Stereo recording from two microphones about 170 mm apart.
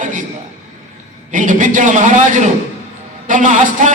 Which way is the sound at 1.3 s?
50° right (ahead or behind).